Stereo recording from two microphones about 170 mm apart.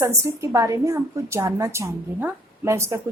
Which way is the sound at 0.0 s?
15° right (ahead or behind).